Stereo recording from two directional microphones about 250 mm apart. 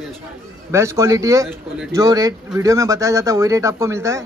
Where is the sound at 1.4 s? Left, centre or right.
Centre.